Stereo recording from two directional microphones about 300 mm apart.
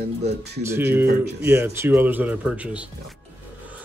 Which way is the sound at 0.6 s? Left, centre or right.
Centre.